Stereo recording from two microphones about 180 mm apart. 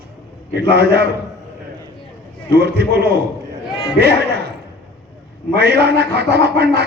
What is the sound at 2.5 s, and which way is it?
Speech, 65° right (ahead or behind).